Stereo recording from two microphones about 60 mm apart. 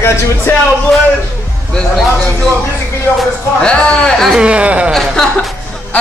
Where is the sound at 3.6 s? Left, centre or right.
Centre.